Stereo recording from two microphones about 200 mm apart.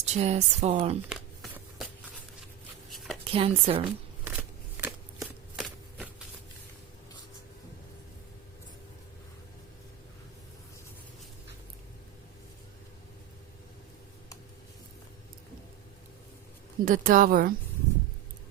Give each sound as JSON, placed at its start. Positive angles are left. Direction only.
{"t": 0.0, "sound": "speech", "side_deg": -35}
{"t": 1.1, "sound": "shuffling cards", "side_deg": -5}
{"t": 2.9, "sound": "a sound", "side_deg": 0}
{"t": 3.2, "sound": "speech", "side_deg": -30}
{"t": 4.2, "sound": "shuffling cards", "side_deg": -10}
{"t": 16.8, "sound": "speech", "side_deg": -45}